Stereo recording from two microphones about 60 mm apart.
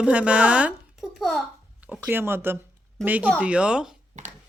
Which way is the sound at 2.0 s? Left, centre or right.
Right.